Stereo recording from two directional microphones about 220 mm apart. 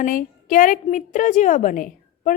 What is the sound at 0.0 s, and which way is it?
A woman's voice, 40° left (ahead or behind).